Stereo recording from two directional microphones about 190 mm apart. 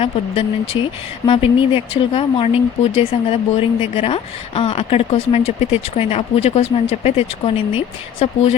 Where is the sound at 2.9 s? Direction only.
30° left (ahead or behind).